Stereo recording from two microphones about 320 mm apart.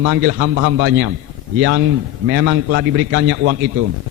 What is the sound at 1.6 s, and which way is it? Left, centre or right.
A man's voice, right.